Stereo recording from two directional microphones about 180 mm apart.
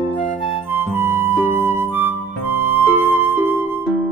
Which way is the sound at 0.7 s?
15° right (ahead or behind).